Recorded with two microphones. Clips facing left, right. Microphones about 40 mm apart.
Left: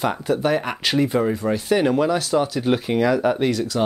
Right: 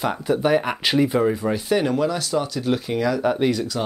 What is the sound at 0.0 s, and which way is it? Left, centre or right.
Speech, centre.